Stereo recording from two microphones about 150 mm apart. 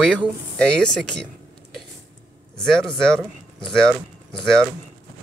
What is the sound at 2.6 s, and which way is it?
Speech, 5° left (ahead or behind).